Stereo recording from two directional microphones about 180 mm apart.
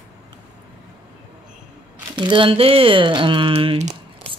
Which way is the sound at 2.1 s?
25° right (ahead or behind).